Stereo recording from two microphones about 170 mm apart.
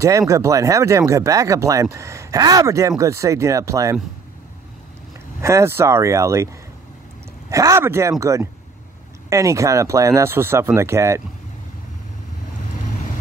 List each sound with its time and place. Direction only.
0.3 s speech: 20° right (ahead or behind)
5.4 s speech: 15° right (ahead or behind)